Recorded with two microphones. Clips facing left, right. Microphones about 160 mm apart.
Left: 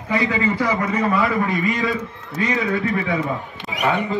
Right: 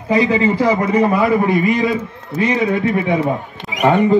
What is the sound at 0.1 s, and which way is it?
A man's voice, 20° right (ahead or behind).